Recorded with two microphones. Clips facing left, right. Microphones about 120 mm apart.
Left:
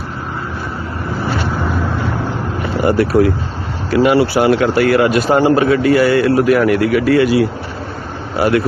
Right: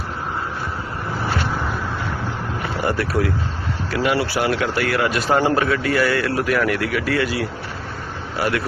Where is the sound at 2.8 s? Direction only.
15° left (ahead or behind).